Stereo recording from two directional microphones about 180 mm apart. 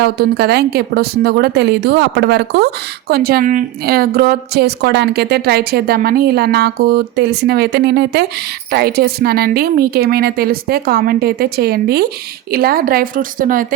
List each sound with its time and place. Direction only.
0.0 s a woman's voice: 60° right (ahead or behind)